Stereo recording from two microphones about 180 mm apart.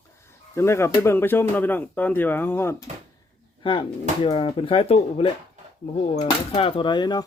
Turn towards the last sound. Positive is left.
turn(degrees=25)  # may be behind; listen again after turning